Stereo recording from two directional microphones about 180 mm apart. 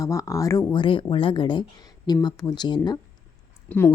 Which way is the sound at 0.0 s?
15° left (ahead or behind).